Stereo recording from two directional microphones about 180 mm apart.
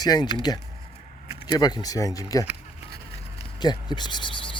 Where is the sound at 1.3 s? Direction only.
30° left (ahead or behind).